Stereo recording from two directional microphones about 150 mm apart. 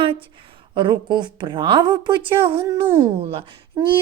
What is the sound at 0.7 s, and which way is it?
A woman's voice, 30° right (ahead or behind).